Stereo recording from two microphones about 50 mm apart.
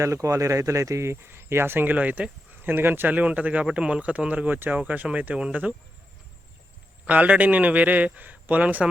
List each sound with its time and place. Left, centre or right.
0.0 s speech: right
1.2 s speech: right
2.6 s speech: right
3.1 s a man's voice: right
7.0 s a man's voice: right